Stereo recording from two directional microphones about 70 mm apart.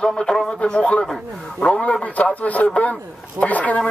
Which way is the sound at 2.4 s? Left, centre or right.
Left.